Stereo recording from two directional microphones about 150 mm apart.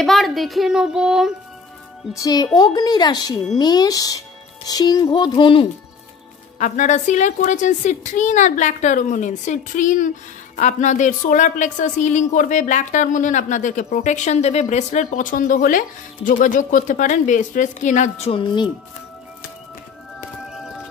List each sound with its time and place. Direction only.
0.0 s a child's voice: centre (ahead or behind)
2.1 s a woman's voice: 25° left (ahead or behind)
6.6 s a woman's voice: 55° left (ahead or behind)
18.4 s speech: 30° left (ahead or behind)
20.4 s music: 5° right (ahead or behind)